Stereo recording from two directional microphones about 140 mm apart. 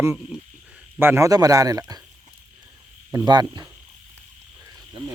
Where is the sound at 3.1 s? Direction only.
30° right (ahead or behind).